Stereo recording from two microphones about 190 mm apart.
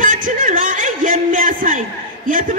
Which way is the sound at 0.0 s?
45° right (ahead or behind).